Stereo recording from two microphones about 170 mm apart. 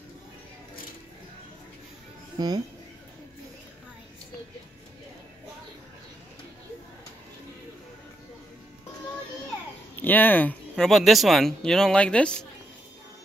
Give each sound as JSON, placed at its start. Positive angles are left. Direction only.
{"t": 2.3, "sound": "speech", "side_deg": -25}
{"t": 9.9, "sound": "speech", "side_deg": 10}